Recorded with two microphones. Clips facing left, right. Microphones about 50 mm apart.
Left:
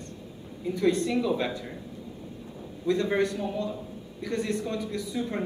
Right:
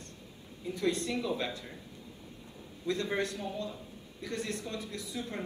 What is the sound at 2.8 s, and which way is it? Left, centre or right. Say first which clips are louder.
A man's voice: left 7 dB; left.